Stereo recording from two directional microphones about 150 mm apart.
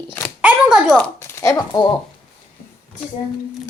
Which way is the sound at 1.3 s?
20° left (ahead or behind).